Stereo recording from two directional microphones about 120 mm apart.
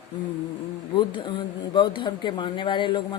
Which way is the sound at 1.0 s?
40° left (ahead or behind).